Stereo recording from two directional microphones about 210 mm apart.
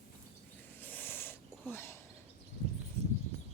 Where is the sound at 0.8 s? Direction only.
10° left (ahead or behind).